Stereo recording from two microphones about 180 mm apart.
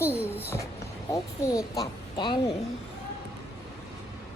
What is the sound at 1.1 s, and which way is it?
Speech, 20° left (ahead or behind).